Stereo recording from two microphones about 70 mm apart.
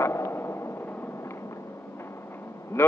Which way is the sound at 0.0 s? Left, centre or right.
Left.